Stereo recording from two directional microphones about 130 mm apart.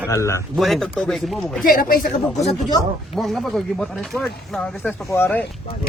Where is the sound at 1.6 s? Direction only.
90° left.